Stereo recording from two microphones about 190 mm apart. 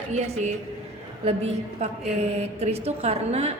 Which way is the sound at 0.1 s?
35° right (ahead or behind).